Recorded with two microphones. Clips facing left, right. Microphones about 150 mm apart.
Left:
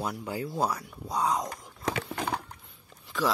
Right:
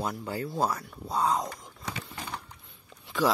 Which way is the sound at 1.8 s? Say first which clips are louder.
Left 8 dB; 90° left.